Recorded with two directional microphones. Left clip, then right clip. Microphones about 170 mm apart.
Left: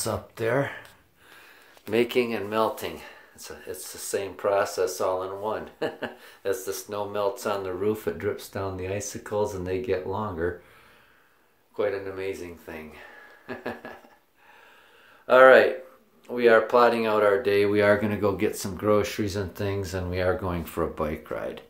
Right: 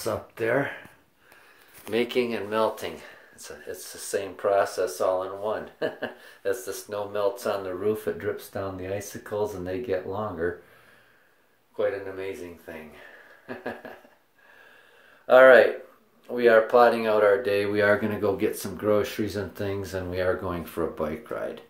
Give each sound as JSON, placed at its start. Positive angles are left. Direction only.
{"t": 0.0, "sound": "speech", "side_deg": 15}
{"t": 1.9, "sound": "speech", "side_deg": 25}
{"t": 2.1, "sound": "speech", "side_deg": 10}
{"t": 11.7, "sound": "speech", "side_deg": 10}
{"t": 15.2, "sound": "speech", "side_deg": 5}